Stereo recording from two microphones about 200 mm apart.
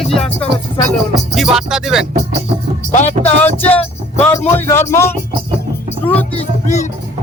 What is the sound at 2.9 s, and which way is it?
Speech, 35° left (ahead or behind).